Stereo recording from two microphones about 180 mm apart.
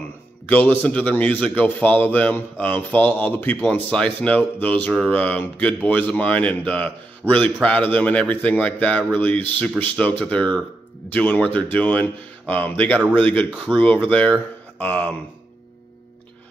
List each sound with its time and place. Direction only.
0.5 s a man's voice: 10° left (ahead or behind)